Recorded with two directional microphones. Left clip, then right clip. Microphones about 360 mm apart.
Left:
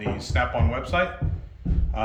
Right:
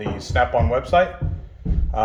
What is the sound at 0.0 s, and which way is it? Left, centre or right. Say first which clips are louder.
Speech: right 5 dB; centre.